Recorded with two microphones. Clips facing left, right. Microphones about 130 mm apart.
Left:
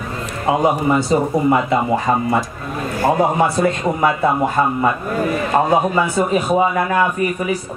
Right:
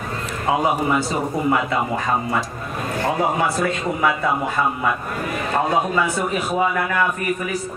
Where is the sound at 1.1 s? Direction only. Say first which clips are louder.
Left 5 dB; 25° left (ahead or behind).